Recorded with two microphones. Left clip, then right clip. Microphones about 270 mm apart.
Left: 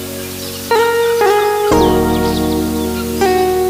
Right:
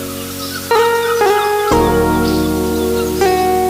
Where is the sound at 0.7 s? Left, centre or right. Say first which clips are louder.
Even; right.